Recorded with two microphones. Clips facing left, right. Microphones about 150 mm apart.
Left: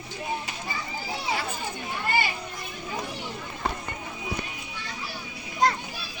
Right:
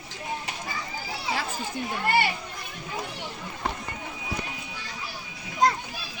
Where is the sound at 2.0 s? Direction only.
70° right (ahead or behind).